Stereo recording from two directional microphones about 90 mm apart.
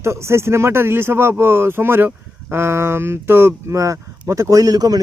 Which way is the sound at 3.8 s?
35° right (ahead or behind).